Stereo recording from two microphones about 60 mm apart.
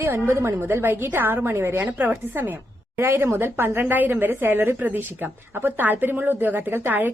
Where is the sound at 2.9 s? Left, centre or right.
Right.